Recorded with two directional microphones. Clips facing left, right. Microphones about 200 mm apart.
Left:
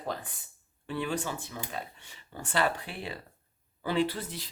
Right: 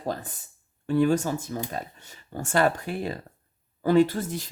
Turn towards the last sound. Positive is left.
turn(degrees=-45)  # may be behind; listen again after turning